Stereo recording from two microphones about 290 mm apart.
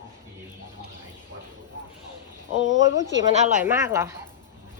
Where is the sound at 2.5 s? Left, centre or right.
Left.